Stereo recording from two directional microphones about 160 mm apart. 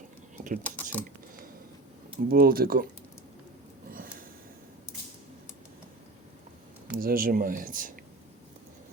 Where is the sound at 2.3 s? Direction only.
65° right (ahead or behind).